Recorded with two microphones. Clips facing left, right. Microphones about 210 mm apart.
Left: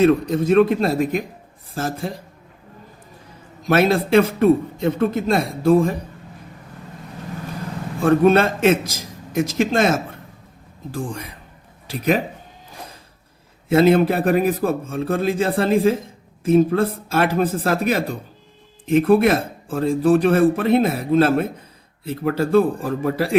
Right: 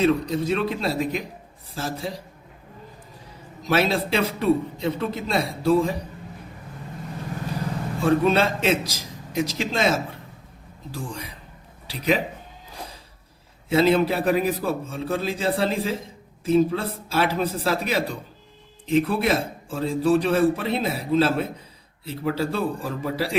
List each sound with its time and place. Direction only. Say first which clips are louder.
0.0 s speech: left 5 dB; 55° left (ahead or behind)
3.6 s speech: left 5 dB; 50° left (ahead or behind)
8.0 s speech: left 5 dB; 55° left (ahead or behind)
13.7 s speech: left 4 dB; 55° left (ahead or behind)